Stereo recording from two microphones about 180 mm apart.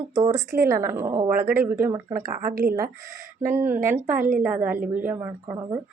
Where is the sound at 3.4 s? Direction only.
10° right (ahead or behind).